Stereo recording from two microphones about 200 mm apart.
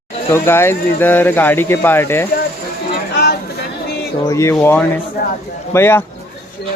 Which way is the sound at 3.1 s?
55° left (ahead or behind).